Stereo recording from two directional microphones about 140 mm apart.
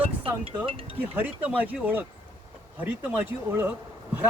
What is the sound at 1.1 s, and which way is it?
Speech, 10° right (ahead or behind).